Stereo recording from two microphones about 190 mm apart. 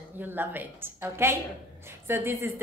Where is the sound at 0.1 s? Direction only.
10° right (ahead or behind).